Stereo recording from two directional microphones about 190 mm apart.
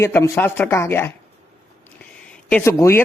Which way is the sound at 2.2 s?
10° left (ahead or behind).